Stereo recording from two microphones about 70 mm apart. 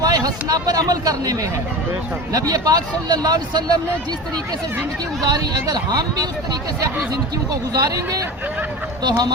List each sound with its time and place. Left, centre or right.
0.0 s speech: right
2.5 s speech: right
5.2 s speech: right
9.0 s speech: right